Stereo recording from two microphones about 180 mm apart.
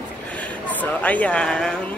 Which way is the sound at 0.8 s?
10° left (ahead or behind).